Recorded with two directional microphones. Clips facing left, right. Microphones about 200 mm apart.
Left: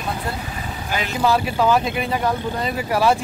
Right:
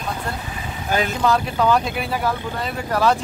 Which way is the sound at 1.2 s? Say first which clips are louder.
Left 4 dB; 5° left (ahead or behind).